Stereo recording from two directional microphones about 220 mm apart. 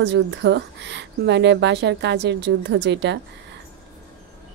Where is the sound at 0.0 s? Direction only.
55° right (ahead or behind).